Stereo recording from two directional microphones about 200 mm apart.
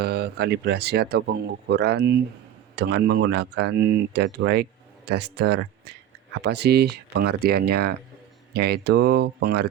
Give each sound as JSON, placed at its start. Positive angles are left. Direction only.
{"t": 0.0, "sound": "speech", "side_deg": -55}